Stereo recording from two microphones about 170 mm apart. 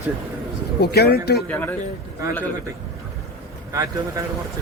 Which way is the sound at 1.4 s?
10° left (ahead or behind).